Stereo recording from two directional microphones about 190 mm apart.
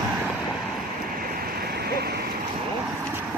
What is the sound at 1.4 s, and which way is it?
Vehicle, 55° right (ahead or behind).